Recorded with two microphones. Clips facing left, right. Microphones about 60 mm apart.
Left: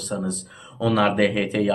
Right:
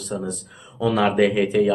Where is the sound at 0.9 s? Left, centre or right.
Centre.